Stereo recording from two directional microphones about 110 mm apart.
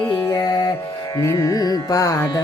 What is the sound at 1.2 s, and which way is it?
Music, 30° left (ahead or behind).